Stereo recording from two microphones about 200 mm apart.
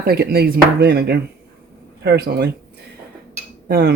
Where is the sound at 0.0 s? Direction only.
50° right (ahead or behind).